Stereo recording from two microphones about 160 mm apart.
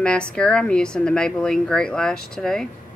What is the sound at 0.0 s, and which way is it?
A woman's voice, 5° left (ahead or behind).